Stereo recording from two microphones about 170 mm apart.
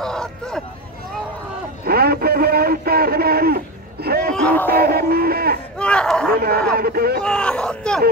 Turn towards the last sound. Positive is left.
turn(degrees=5)  # may be behind; listen again after turning